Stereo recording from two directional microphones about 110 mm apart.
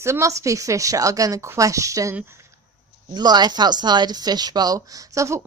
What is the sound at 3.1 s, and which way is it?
Speech, 40° right (ahead or behind).